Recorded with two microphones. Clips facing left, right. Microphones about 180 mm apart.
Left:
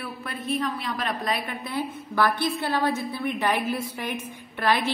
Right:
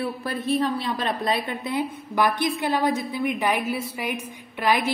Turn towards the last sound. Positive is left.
turn(degrees=-10)  # may be behind; listen again after turning